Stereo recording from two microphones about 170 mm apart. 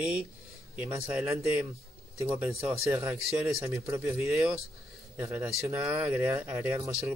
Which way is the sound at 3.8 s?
15° right (ahead or behind).